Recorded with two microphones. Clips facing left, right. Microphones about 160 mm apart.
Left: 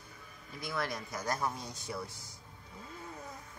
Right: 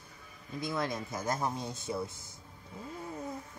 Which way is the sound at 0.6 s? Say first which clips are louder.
Right 3 dB; 20° right (ahead or behind).